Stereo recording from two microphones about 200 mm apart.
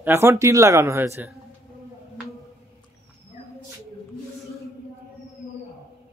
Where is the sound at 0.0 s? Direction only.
10° right (ahead or behind).